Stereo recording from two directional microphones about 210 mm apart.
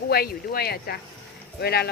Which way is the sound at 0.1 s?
45° left (ahead or behind).